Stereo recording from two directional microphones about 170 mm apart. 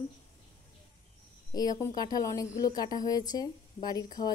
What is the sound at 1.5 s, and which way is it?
Speech, 20° left (ahead or behind).